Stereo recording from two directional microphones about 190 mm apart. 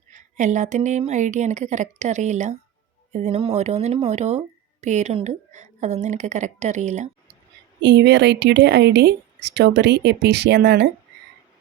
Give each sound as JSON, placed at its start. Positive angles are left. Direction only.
{"t": 0.1, "sound": "speech", "side_deg": -40}
{"t": 7.8, "sound": "speech", "side_deg": -65}